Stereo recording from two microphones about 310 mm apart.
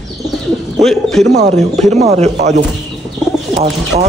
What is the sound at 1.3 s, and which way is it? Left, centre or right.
Speech, right.